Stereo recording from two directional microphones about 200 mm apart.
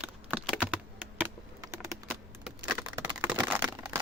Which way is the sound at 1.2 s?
15° right (ahead or behind).